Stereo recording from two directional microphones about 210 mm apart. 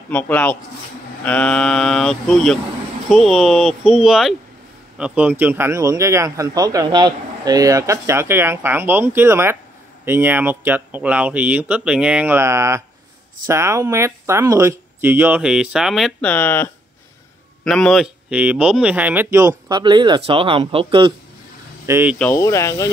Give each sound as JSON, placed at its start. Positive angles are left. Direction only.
{"t": 0.1, "sound": "a man's voice", "side_deg": 10}
{"t": 21.8, "sound": "speech", "side_deg": -10}
{"t": 22.2, "sound": "speech", "side_deg": 15}